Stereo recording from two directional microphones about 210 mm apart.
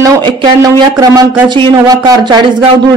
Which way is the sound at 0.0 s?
20° right (ahead or behind).